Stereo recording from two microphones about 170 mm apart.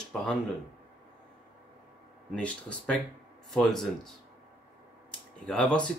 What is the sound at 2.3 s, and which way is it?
Speech, 5° left (ahead or behind).